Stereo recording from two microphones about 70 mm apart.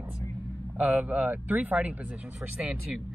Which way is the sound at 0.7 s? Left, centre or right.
Right.